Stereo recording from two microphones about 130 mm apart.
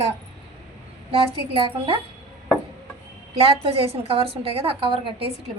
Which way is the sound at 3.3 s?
50° right (ahead or behind).